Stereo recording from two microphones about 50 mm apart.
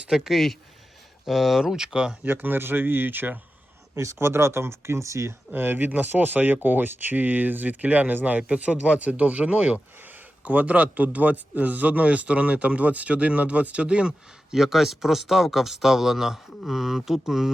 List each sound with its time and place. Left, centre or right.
0.1 s speech: centre
2.2 s speech: right
3.9 s speech: right
4.2 s speech: right
5.5 s a man's voice: right
10.0 s a man's voice: right
14.5 s speech: centre